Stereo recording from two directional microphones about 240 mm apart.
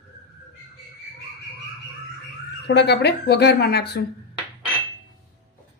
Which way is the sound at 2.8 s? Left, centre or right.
Left.